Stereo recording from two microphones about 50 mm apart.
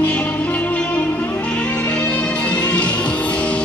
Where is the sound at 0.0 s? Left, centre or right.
Left.